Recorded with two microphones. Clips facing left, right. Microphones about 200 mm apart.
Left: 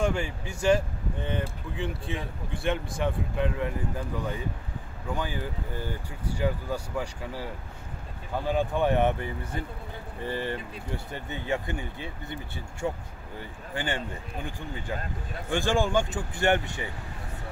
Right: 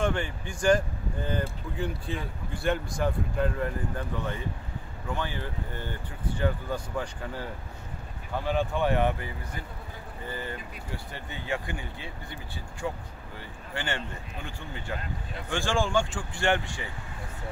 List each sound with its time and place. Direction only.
0.0 s speech: 10° left (ahead or behind)
8.5 s speech: 15° left (ahead or behind)
10.2 s speech: 30° left (ahead or behind)
11.1 s speech: 20° left (ahead or behind)